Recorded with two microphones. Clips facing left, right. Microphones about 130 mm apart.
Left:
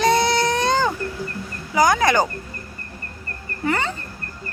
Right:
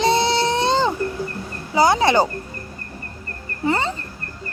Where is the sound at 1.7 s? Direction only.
30° right (ahead or behind).